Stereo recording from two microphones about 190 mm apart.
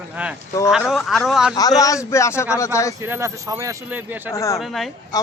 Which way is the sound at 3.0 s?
15° right (ahead or behind).